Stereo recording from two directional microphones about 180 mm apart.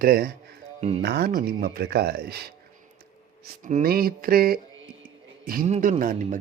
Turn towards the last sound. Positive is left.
turn(degrees=-45)  # may be behind; listen again after turning